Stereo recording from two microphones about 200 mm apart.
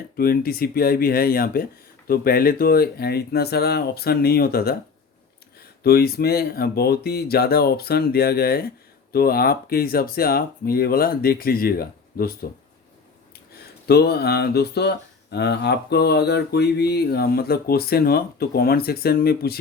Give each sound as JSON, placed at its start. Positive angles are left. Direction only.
{"t": 0.2, "sound": "speech", "side_deg": 50}
{"t": 5.8, "sound": "speech", "side_deg": 50}